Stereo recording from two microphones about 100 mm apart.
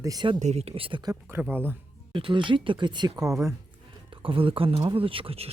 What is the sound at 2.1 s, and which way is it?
Speech, 60° right (ahead or behind).